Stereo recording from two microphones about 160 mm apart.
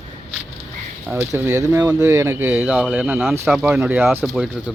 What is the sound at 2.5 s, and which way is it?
Speech, 5° right (ahead or behind).